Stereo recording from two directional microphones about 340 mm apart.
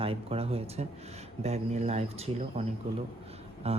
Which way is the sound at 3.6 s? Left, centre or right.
Centre.